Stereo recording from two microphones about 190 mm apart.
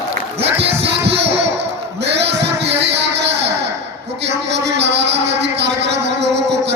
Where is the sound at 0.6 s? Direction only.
65° right (ahead or behind).